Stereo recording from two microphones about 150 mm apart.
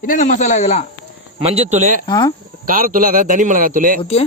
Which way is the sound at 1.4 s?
45° right (ahead or behind).